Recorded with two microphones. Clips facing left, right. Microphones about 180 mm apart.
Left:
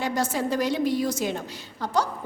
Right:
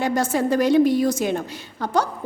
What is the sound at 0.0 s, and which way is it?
A woman's voice, 50° right (ahead or behind).